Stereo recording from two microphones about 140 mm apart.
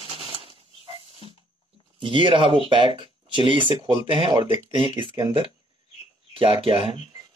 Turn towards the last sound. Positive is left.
turn(degrees=-40)  # may be behind; listen again after turning